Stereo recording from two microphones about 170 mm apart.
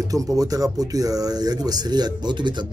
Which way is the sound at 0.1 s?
20° right (ahead or behind).